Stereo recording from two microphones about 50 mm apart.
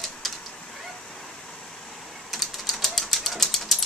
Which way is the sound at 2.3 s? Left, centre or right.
Centre.